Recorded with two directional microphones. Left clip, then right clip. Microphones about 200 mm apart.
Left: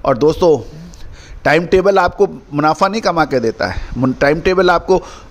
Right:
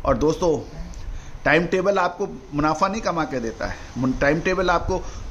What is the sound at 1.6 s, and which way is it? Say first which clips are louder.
A man's voice: left 9 dB; 40° left (ahead or behind).